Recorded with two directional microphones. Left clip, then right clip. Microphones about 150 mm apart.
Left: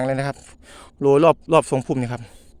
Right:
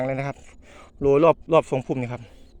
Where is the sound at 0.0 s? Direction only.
30° left (ahead or behind).